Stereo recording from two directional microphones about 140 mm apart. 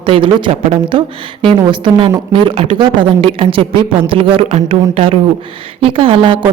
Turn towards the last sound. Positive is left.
turn(degrees=-40)  # may be behind; listen again after turning